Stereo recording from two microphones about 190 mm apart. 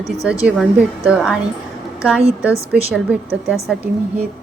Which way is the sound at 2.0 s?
5° right (ahead or behind).